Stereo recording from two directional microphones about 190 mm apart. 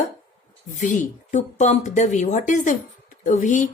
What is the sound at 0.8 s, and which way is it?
A woman's voice, 40° left (ahead or behind).